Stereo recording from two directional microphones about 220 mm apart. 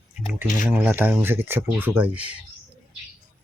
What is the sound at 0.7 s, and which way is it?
Speech, 10° right (ahead or behind).